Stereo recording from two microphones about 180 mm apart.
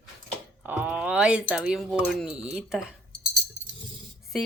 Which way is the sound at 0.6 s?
10° right (ahead or behind).